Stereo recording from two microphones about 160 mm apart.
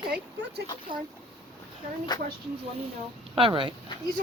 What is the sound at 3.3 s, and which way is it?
Speech, 35° right (ahead or behind).